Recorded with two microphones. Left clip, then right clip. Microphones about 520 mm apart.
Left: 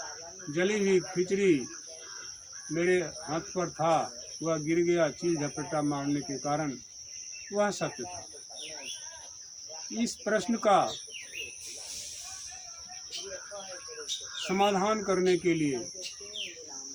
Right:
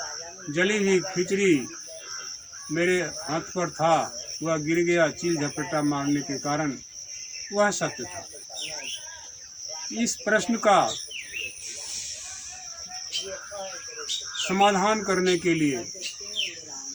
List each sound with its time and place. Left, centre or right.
0.5 s cricket: left
2.7 s cricket: left
10.0 s cricket: left
14.4 s cricket: left